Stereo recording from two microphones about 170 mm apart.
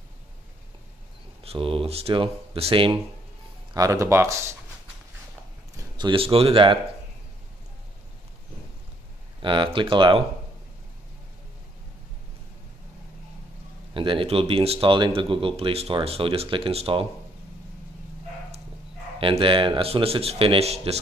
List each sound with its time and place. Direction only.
1.4 s speech: 35° right (ahead or behind)
3.7 s speech: 20° right (ahead or behind)
5.9 s speech: 30° right (ahead or behind)
9.4 s speech: 30° right (ahead or behind)
13.9 s speech: 30° right (ahead or behind)
19.1 s speech: 30° right (ahead or behind)